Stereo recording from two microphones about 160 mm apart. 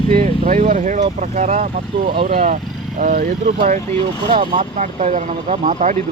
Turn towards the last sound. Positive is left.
turn(degrees=-50)  # may be behind; listen again after turning